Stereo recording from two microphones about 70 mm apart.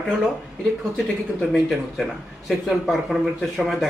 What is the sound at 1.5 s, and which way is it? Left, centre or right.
Speech, centre.